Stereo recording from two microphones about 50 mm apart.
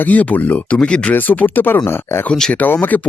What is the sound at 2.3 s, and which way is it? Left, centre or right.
Speech, centre.